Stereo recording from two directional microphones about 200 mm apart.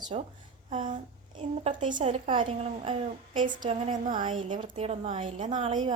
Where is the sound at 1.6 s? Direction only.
35° right (ahead or behind).